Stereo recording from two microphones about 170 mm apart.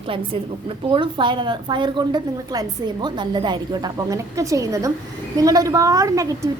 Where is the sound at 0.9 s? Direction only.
30° right (ahead or behind).